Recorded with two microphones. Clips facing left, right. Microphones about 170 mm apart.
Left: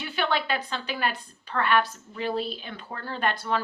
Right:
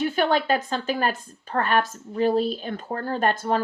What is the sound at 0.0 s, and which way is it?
Speech, 45° right (ahead or behind).